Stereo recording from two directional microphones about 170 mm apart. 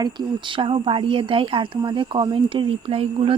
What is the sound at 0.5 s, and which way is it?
Speech, 30° right (ahead or behind).